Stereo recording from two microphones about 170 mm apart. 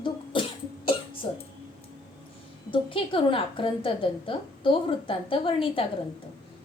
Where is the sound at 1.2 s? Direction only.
30° left (ahead or behind).